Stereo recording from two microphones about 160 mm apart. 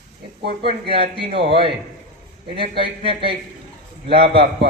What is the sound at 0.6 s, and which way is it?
Speech, 35° right (ahead or behind).